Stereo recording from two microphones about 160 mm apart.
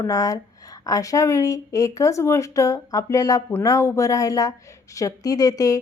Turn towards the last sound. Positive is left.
turn(degrees=20)  # may be behind; listen again after turning